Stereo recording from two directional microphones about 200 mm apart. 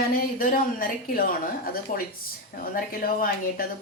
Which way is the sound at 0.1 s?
45° left (ahead or behind).